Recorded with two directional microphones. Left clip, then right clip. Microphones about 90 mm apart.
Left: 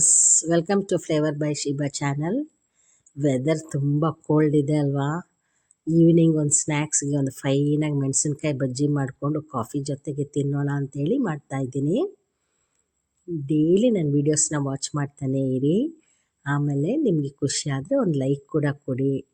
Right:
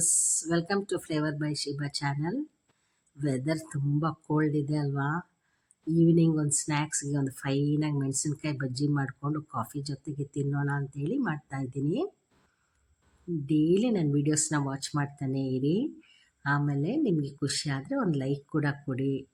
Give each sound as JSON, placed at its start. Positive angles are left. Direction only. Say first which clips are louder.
{"t": 0.0, "sound": "speech", "louder": "left 10 dB", "side_deg": 30}
{"t": 13.5, "sound": "speech", "louder": "left 6 dB", "side_deg": 35}